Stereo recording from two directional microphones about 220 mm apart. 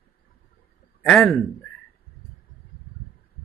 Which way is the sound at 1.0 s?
Centre (ahead or behind).